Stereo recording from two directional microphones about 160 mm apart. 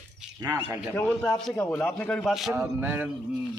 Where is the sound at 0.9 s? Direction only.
10° left (ahead or behind).